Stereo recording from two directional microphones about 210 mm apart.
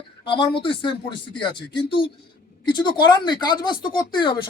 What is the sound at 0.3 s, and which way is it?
Speech, 20° left (ahead or behind).